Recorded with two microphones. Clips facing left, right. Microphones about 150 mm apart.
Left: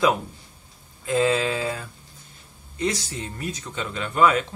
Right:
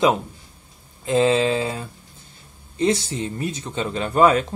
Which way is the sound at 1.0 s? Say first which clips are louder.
Right 4 dB; 25° right (ahead or behind).